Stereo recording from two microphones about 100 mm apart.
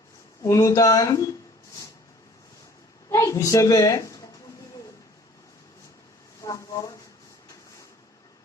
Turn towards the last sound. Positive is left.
turn(degrees=35)  # may be behind; listen again after turning